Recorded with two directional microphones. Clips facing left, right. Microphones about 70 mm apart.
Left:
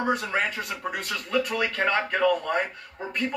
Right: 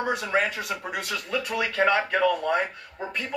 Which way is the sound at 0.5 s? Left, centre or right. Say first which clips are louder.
Right 1 dB; left.